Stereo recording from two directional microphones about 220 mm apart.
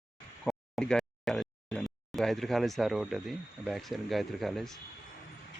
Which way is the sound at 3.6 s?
Centre (ahead or behind).